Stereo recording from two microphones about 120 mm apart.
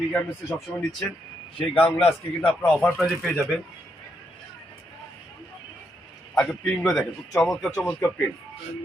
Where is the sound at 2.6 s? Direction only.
10° left (ahead or behind).